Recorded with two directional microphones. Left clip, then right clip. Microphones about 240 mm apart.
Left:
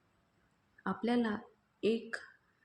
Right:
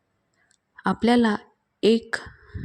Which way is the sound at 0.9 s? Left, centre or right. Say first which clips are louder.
Right 14 dB; right.